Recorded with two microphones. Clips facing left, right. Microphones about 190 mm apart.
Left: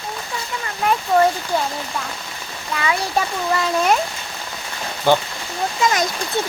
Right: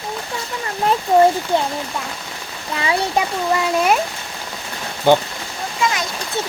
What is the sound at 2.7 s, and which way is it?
Speech, 25° right (ahead or behind).